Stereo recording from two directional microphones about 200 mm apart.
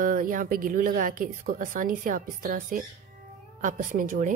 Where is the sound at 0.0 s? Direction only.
45° right (ahead or behind).